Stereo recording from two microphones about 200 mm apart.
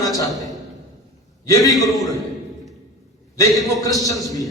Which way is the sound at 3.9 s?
Centre (ahead or behind).